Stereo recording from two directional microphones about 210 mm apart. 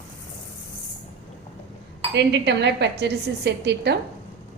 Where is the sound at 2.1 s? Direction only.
55° right (ahead or behind).